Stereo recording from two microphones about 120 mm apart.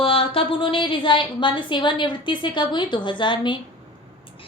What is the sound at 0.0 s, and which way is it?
A woman's voice, 50° left (ahead or behind).